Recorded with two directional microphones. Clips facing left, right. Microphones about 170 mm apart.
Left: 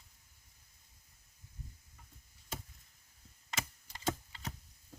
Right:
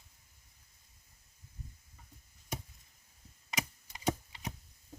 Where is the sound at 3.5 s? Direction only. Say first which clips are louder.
Right 3 dB; 15° right (ahead or behind).